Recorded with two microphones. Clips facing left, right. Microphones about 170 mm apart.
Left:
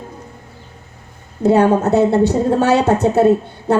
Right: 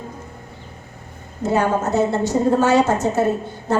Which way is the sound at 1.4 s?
65° left (ahead or behind).